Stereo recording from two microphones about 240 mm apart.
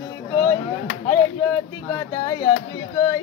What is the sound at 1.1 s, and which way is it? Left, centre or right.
Speech, centre.